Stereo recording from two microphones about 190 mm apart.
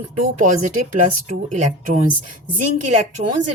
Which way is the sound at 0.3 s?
45° right (ahead or behind).